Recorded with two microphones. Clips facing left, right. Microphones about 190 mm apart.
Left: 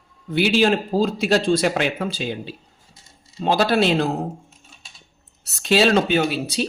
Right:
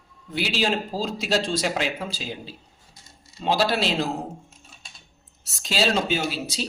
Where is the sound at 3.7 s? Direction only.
55° left (ahead or behind).